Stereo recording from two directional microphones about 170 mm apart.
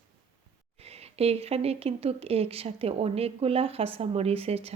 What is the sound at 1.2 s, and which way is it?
Speech, 35° right (ahead or behind).